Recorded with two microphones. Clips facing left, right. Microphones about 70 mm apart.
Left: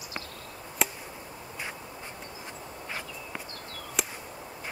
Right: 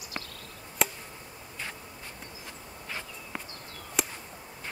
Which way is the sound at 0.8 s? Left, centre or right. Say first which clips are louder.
Right 1 dB; centre.